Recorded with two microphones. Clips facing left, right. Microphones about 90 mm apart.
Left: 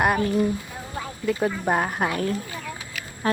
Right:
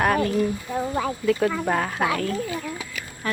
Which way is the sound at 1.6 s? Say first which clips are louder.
Even; 20° left (ahead or behind).